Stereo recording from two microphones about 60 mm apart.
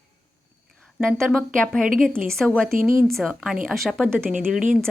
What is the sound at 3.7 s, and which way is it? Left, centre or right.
Speech, centre.